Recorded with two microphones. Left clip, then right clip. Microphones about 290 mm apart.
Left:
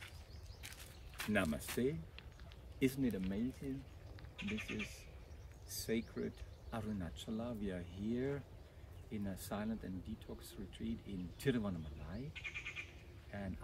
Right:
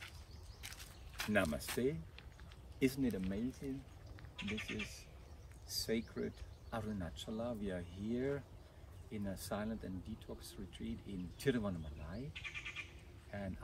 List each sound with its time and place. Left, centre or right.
1.2 s speech: centre
4.4 s speech: right
5.9 s speech: centre
12.4 s goat: right
13.3 s speech: centre